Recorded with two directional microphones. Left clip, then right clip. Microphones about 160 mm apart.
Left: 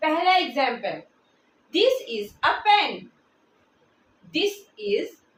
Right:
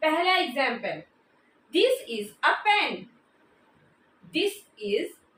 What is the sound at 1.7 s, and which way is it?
A woman's voice, 15° left (ahead or behind).